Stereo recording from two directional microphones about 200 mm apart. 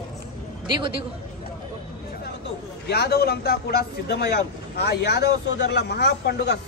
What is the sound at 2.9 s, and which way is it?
A man's voice, 55° left (ahead or behind).